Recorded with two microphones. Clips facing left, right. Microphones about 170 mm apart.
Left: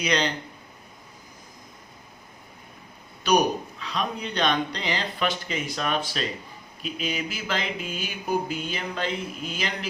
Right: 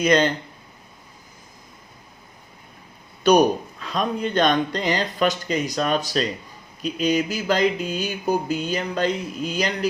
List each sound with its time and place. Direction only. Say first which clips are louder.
0.0 s speech: right 7 dB; 50° right (ahead or behind)
3.8 s speech: right 5 dB; 50° right (ahead or behind)
6.8 s mantra: right 9 dB; 40° right (ahead or behind)